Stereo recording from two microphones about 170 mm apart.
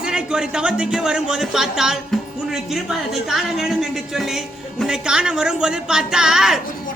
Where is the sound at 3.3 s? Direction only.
Centre (ahead or behind).